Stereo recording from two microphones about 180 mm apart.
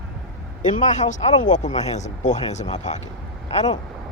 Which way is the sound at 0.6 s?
45° left (ahead or behind).